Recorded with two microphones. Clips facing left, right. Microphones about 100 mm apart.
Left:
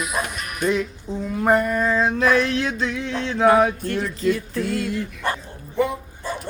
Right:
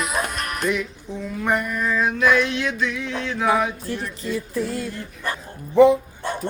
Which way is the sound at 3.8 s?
85° left.